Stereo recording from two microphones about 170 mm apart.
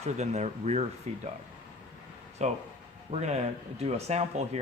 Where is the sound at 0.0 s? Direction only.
40° right (ahead or behind).